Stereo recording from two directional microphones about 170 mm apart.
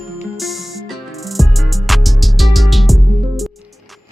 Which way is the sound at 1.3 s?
Centre (ahead or behind).